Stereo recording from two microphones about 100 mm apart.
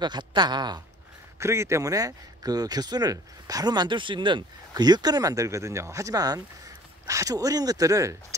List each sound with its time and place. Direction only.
0.0 s speech: 50° right (ahead or behind)
1.4 s speech: 30° right (ahead or behind)